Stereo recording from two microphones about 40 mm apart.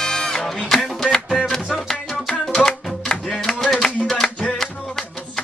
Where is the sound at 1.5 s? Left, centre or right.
Centre.